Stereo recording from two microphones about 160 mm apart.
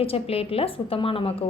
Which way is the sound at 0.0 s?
35° left (ahead or behind).